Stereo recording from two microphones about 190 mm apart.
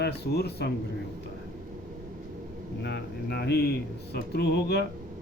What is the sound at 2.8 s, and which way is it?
Speech, 65° left (ahead or behind).